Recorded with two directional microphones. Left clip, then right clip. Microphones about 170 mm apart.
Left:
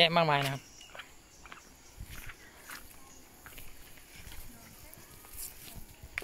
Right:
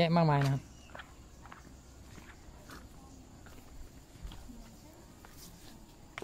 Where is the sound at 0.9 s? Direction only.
50° left (ahead or behind).